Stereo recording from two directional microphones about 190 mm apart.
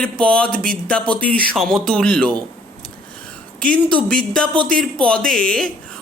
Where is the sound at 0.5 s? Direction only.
50° right (ahead or behind).